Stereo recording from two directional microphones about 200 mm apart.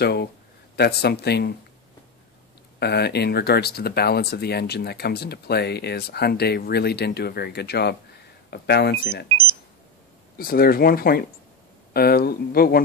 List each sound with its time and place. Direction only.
0.0 s speech: 55° left (ahead or behind)
2.8 s speech: 55° left (ahead or behind)
10.3 s speech: 45° left (ahead or behind)